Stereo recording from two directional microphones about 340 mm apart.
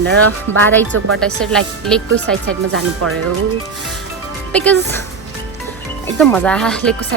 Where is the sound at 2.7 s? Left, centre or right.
Right.